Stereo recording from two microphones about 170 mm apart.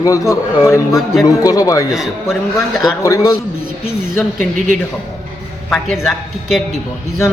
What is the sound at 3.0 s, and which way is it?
Speech, 20° left (ahead or behind).